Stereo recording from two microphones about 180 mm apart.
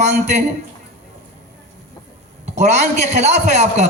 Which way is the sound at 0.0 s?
40° right (ahead or behind).